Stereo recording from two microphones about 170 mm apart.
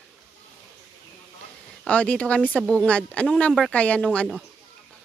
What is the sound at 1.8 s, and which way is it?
Speech, 10° left (ahead or behind).